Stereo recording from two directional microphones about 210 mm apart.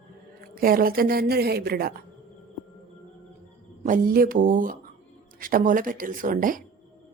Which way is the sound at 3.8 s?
40° right (ahead or behind).